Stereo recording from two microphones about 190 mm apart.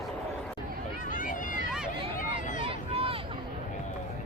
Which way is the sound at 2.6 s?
30° right (ahead or behind).